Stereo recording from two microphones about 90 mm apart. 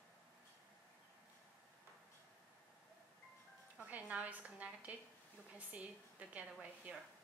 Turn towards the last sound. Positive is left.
turn(degrees=-15)  # may be behind; listen again after turning